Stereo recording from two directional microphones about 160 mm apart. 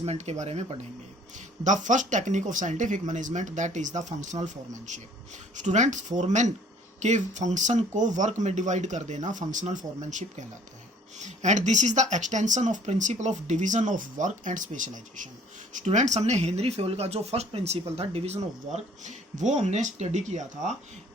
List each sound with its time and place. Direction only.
0.0 s speech: 40° right (ahead or behind)